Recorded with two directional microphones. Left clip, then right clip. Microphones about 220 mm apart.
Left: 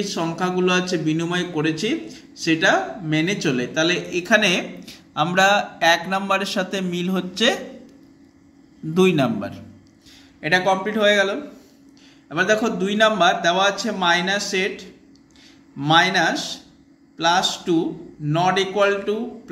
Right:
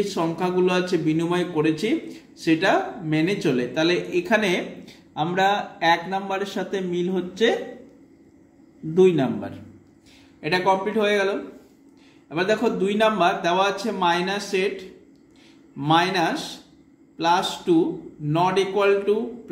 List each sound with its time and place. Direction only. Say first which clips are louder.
0.0 s a man's voice: even; centre (ahead or behind); by 7.5 s 20° left (ahead or behind)
8.9 s a man's voice: even; 20° left (ahead or behind)